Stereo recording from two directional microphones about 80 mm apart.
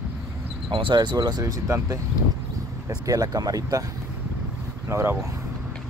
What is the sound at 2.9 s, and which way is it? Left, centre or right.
Speech, right.